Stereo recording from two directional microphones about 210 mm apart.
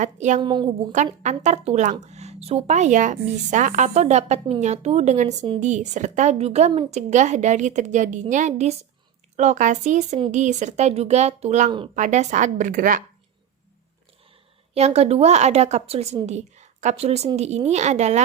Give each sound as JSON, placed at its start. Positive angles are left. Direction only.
{"t": 0.0, "sound": "speech", "side_deg": -35}
{"t": 0.4, "sound": "a woman's voice", "side_deg": -20}
{"t": 1.2, "sound": "speech", "side_deg": -35}
{"t": 14.7, "sound": "speech", "side_deg": -30}